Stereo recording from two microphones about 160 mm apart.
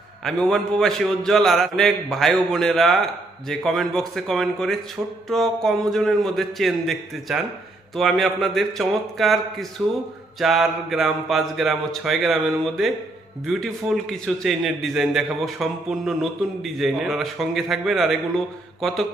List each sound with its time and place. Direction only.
0.3 s a man's voice: 5° left (ahead or behind)